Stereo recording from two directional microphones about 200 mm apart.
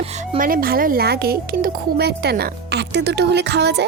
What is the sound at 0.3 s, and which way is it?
Speech, 45° right (ahead or behind).